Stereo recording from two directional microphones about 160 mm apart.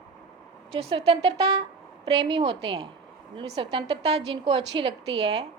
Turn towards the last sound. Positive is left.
turn(degrees=-35)  # may be behind; listen again after turning